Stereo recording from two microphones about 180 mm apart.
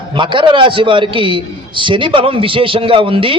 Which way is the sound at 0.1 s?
25° right (ahead or behind).